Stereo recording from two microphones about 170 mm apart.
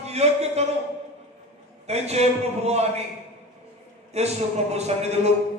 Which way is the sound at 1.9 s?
40° right (ahead or behind).